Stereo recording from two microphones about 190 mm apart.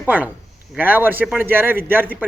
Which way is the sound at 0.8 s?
10° right (ahead or behind).